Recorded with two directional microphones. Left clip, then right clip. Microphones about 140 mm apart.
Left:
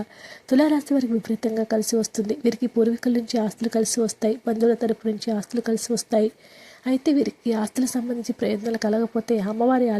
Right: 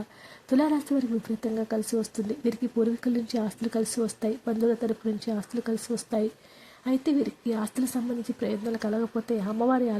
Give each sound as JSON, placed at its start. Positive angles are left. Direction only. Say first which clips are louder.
{"t": 0.4, "sound": "speech", "louder": "left 5 dB", "side_deg": 25}